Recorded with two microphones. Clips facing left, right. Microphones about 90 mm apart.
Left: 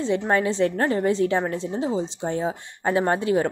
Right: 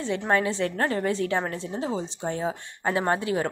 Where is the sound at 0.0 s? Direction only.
25° left (ahead or behind).